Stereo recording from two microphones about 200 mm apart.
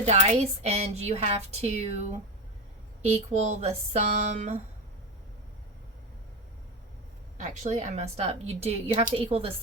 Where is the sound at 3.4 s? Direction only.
35° right (ahead or behind).